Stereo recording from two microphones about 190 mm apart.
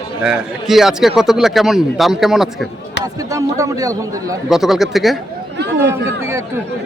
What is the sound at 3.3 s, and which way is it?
Speech, 15° right (ahead or behind).